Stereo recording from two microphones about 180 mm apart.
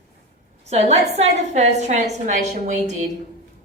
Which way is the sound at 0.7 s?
35° right (ahead or behind).